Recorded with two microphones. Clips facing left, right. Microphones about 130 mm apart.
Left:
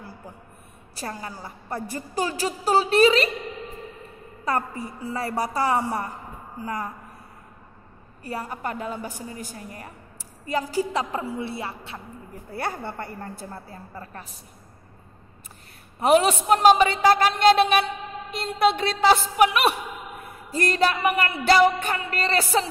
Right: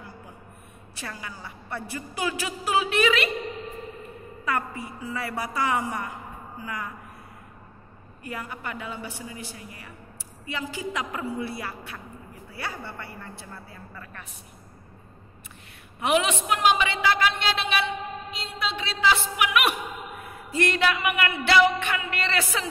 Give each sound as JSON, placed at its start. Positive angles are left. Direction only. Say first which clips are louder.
{"t": 0.9, "sound": "a woman's voice", "louder": "left 5 dB", "side_deg": 40}
{"t": 4.5, "sound": "a woman's voice", "louder": "left 3 dB", "side_deg": 40}
{"t": 8.2, "sound": "a woman's voice", "louder": "left 4 dB", "side_deg": 35}
{"t": 12.4, "sound": "a woman's voice", "louder": "left 6 dB", "side_deg": 50}
{"t": 16.0, "sound": "a woman's voice", "louder": "left 5 dB", "side_deg": 40}